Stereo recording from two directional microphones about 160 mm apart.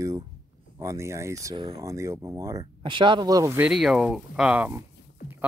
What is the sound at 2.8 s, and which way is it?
Speech, 30° right (ahead or behind).